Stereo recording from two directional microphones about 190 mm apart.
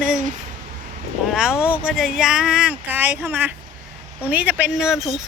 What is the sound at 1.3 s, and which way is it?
Speech, 5° right (ahead or behind).